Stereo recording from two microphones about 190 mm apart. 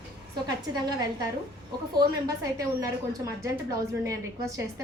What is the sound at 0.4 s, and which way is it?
A woman's voice, 20° right (ahead or behind).